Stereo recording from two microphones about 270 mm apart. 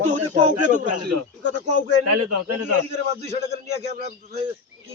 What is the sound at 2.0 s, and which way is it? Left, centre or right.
Speech, right.